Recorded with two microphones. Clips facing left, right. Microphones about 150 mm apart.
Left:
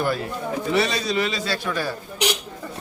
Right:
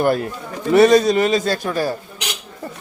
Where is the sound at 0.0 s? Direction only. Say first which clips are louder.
Right 6 dB; 50° right (ahead or behind).